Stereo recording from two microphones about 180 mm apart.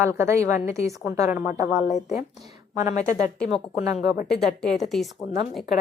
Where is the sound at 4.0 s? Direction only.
40° left (ahead or behind).